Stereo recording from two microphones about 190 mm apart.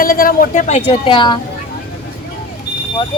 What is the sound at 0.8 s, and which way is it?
Speech, 25° left (ahead or behind).